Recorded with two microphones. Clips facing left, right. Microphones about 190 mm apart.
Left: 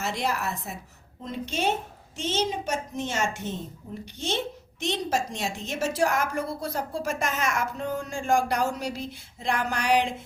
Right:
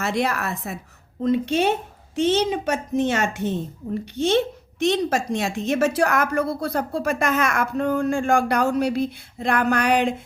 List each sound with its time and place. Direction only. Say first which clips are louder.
0.0 s speech: right 5 dB; 60° right (ahead or behind)